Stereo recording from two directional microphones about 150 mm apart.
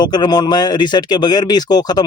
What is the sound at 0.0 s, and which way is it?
Speech, 30° left (ahead or behind).